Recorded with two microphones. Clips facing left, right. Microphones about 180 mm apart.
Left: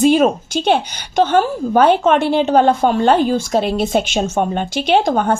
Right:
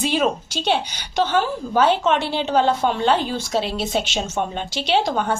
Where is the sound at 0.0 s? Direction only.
50° left (ahead or behind).